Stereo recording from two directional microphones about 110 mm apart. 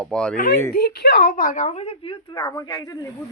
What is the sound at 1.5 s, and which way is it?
Speech, 85° left.